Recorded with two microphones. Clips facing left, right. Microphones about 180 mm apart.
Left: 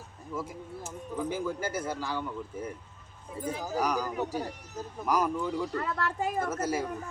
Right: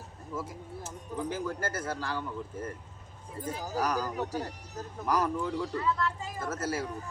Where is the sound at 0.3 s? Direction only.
10° left (ahead or behind).